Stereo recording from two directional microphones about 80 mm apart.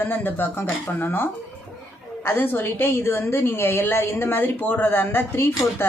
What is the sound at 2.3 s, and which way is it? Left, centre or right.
Speech, left.